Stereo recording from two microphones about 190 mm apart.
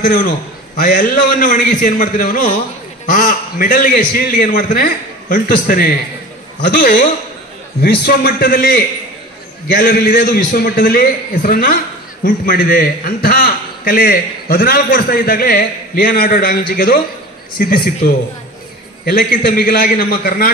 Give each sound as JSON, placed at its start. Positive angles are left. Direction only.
{"t": 0.0, "sound": "a man's voice", "side_deg": 45}
{"t": 19.0, "sound": "a man's voice", "side_deg": 55}